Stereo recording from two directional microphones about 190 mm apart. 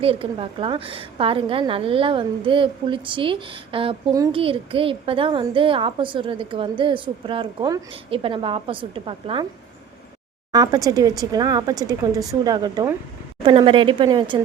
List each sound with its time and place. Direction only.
0.0 s a woman's voice: 30° right (ahead or behind)
10.5 s a woman's voice: 20° right (ahead or behind)